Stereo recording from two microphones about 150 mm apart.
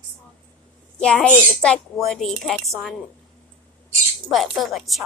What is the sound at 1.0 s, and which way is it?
A woman's voice, 5° left (ahead or behind).